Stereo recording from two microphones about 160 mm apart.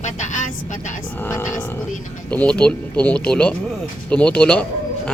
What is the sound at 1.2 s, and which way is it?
Speech, 15° left (ahead or behind).